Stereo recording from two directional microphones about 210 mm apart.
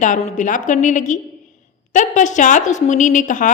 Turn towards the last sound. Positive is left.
turn(degrees=35)  # may be behind; listen again after turning